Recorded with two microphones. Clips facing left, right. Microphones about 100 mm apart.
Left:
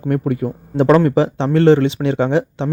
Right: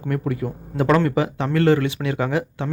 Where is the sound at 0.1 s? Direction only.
30° left (ahead or behind).